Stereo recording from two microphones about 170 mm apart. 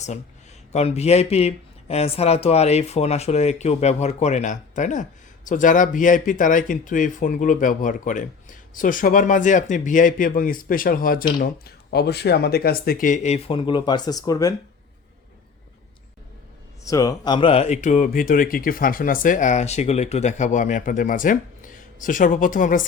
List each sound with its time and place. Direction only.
0.7 s speech: 40° left (ahead or behind); by 11.3 s 55° left (ahead or behind)
11.3 s speech: 70° left (ahead or behind); by 14.5 s 20° left (ahead or behind)
16.8 s speech: 20° left (ahead or behind); by 22.9 s 50° left (ahead or behind)